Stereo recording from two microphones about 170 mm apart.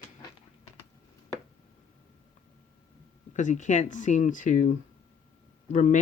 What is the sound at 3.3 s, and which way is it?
Speech, 45° left (ahead or behind).